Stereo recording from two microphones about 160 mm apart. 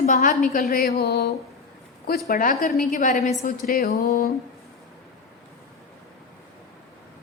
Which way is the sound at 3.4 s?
70° left (ahead or behind).